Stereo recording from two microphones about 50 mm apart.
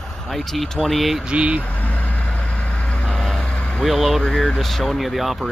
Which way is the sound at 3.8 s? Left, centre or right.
Centre.